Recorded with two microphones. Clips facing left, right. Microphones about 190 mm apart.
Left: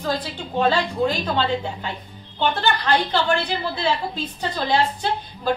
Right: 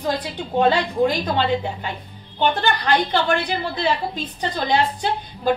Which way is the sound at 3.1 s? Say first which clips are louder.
Right 1 dB; 15° right (ahead or behind).